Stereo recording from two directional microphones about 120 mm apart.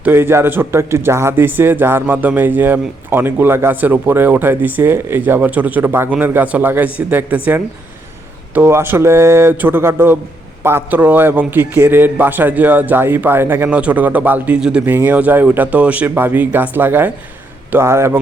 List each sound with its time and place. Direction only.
0.0 s speech: 20° right (ahead or behind)